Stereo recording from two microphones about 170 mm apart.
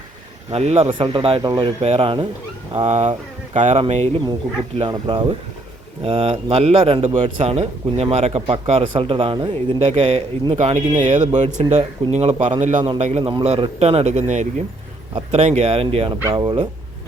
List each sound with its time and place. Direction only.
0.5 s a man's voice: 35° right (ahead or behind)
4.8 s a man's voice: 25° right (ahead or behind)